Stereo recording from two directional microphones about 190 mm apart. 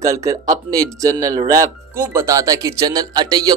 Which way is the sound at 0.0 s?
15° right (ahead or behind).